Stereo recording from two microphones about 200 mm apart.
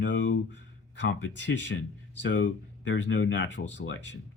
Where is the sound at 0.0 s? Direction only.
65° left (ahead or behind).